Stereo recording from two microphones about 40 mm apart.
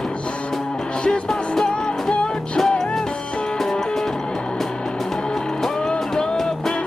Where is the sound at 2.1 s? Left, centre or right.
Left.